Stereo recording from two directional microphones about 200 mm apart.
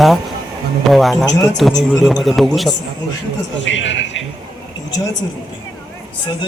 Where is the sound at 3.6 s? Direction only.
65° left (ahead or behind).